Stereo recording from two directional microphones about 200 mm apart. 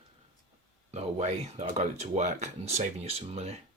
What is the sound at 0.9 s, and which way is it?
Speech, 35° right (ahead or behind).